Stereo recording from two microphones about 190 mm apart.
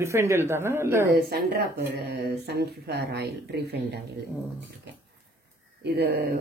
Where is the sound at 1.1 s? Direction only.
55° right (ahead or behind).